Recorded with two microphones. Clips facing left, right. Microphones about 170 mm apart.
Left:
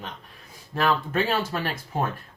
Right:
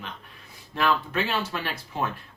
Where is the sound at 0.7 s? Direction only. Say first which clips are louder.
Left 1 dB; 40° left (ahead or behind).